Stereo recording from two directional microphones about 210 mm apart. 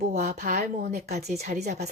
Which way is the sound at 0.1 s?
35° right (ahead or behind).